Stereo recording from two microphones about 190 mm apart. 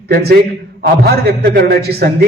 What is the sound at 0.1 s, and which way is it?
A man's voice, 55° right (ahead or behind).